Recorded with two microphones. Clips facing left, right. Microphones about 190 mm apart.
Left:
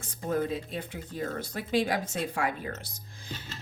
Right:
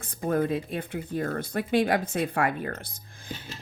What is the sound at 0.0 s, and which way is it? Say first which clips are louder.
A woman's voice: right 4 dB; 55° right (ahead or behind).